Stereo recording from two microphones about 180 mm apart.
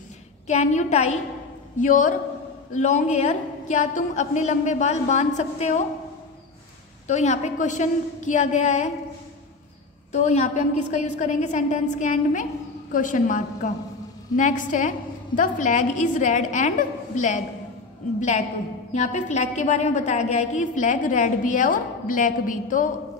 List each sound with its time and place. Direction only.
0.5 s a woman's voice: 40° left (ahead or behind)
7.1 s a woman's voice: 40° left (ahead or behind)
10.1 s a woman's voice: 40° left (ahead or behind)
18.9 s a woman's voice: 40° left (ahead or behind)